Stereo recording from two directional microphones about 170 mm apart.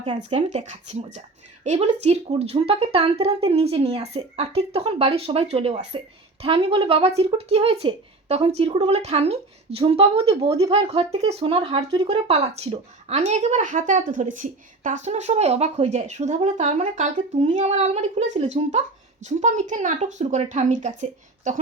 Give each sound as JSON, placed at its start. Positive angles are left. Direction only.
{"t": 0.3, "sound": "a woman's voice", "side_deg": -40}